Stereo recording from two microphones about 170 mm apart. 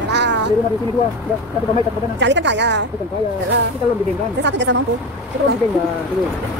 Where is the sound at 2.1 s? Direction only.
90° right.